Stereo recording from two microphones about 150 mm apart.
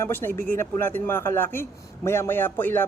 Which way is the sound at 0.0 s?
15° left (ahead or behind).